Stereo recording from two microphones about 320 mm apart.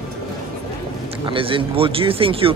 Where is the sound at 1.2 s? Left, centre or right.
Centre.